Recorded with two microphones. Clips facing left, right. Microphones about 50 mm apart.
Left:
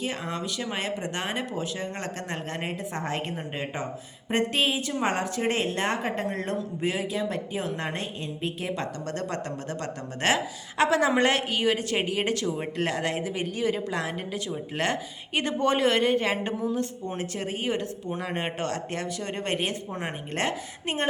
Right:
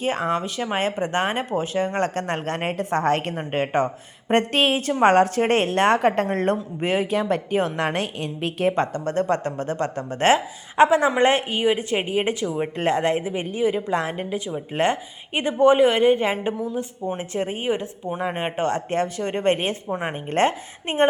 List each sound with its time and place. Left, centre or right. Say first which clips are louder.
0.0 s a woman's voice: right 8 dB; right; by 12.6 s centre
12.7 s speech: right 10 dB; right
13.9 s a woman's voice: right 6 dB; right; by 17.2 s centre
17.3 s speech: right 5 dB; right
19.9 s speech: right 6 dB; centre
20.3 s speech: right 9 dB; right